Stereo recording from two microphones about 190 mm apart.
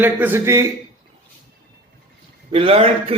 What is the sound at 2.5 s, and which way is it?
Speech, 30° right (ahead or behind).